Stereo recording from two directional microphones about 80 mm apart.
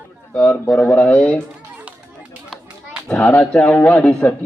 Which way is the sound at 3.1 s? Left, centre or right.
Centre.